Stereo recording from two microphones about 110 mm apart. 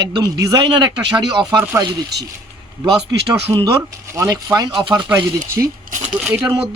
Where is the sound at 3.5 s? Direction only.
45° right (ahead or behind).